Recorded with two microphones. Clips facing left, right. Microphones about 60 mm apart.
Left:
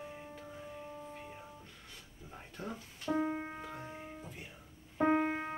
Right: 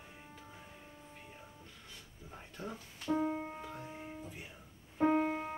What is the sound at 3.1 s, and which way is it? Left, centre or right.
Music, left.